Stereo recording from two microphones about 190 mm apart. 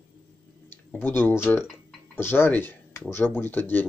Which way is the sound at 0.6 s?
10° left (ahead or behind).